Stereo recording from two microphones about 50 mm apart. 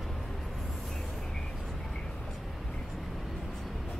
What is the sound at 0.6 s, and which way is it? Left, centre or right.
Vehicle, centre.